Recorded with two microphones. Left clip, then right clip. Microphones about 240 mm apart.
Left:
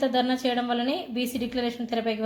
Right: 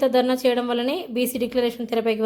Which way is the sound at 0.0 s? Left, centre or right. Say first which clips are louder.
Right 6 dB; right.